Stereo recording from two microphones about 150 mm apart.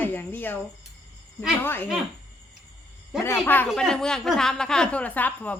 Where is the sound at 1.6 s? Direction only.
15° left (ahead or behind).